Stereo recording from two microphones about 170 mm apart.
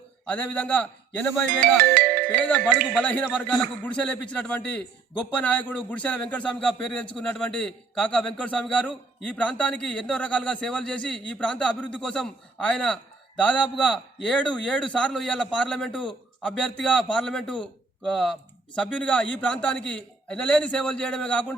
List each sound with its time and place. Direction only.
0.3 s a man's voice: 10° left (ahead or behind)
1.6 s music: 55° right (ahead or behind)
2.5 s a man's voice: 10° left (ahead or behind)